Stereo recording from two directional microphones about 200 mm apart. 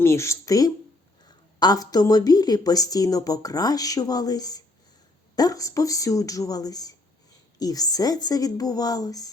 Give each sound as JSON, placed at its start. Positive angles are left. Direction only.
{"t": 0.0, "sound": "a woman's voice", "side_deg": 15}